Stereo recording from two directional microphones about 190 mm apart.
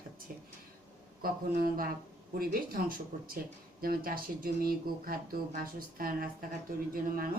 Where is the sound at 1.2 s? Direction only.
50° right (ahead or behind).